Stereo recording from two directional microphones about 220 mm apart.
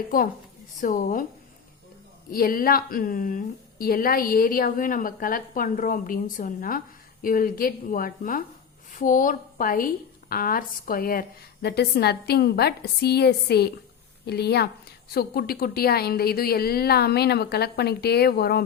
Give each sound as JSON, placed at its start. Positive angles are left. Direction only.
{"t": 0.1, "sound": "speech", "side_deg": 40}
{"t": 2.3, "sound": "a woman's voice", "side_deg": 40}